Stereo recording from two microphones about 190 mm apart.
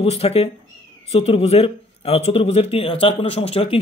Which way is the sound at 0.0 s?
30° left (ahead or behind).